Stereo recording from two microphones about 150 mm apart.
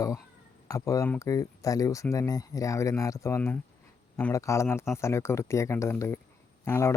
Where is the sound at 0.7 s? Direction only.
20° left (ahead or behind).